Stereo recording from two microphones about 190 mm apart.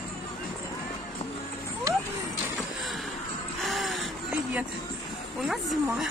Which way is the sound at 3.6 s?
Centre (ahead or behind).